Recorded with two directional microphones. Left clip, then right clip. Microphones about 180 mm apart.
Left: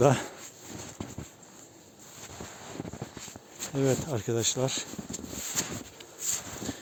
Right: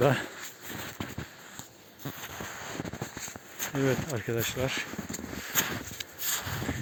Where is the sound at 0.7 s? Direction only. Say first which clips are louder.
Right 3 dB; 65° right (ahead or behind).